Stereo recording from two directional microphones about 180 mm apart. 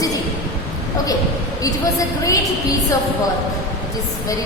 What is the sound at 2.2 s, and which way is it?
Speech, 20° left (ahead or behind).